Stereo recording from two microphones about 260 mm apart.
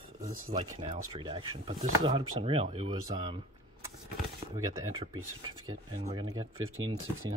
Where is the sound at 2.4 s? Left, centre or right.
Right.